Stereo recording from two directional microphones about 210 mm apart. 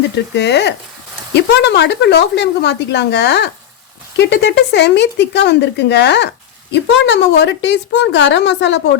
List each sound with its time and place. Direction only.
0.3 s a woman's voice: 55° left (ahead or behind)